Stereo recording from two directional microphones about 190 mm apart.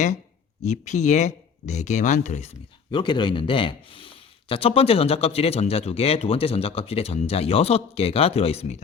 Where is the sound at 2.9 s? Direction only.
25° left (ahead or behind).